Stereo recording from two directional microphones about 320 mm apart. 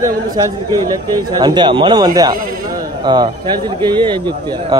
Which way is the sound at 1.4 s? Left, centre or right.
Centre.